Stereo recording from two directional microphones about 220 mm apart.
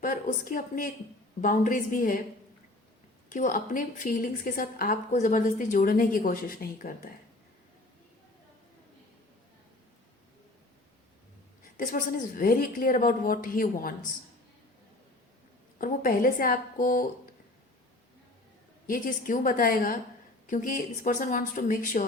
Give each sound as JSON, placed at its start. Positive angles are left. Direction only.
{"t": 0.0, "sound": "a woman's voice", "side_deg": 40}
{"t": 3.2, "sound": "a woman's voice", "side_deg": 35}
{"t": 11.8, "sound": "a woman's voice", "side_deg": 35}
{"t": 15.8, "sound": "a woman's voice", "side_deg": 40}
{"t": 18.9, "sound": "a woman's voice", "side_deg": 40}